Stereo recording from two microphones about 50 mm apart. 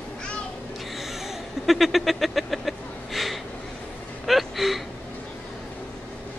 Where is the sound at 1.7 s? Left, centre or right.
Centre.